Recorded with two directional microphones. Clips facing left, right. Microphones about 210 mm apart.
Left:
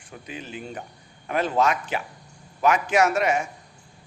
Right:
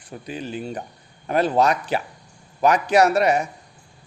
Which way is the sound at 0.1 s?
35° right (ahead or behind).